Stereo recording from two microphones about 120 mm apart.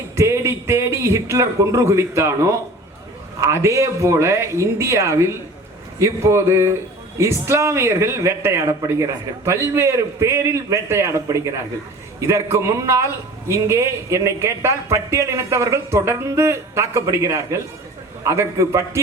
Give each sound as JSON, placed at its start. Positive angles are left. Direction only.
{"t": 0.2, "sound": "a man's voice", "side_deg": -25}